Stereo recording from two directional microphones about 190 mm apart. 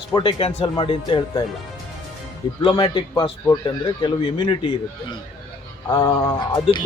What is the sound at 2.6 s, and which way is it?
Speech, 25° left (ahead or behind).